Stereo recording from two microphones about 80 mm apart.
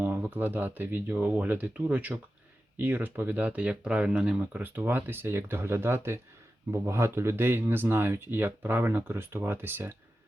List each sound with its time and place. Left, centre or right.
0.0 s speech: right